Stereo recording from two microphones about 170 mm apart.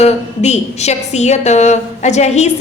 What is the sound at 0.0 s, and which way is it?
A woman's voice, 40° left (ahead or behind).